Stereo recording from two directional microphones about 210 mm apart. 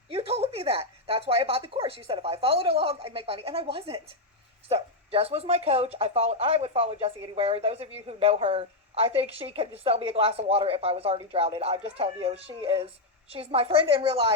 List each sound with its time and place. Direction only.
0.1 s speech: 30° right (ahead or behind)